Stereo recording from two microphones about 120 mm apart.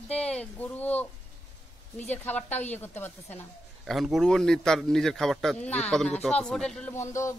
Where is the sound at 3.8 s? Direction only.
Centre (ahead or behind).